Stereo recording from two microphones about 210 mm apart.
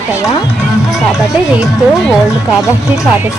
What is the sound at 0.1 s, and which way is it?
Speech, 15° left (ahead or behind).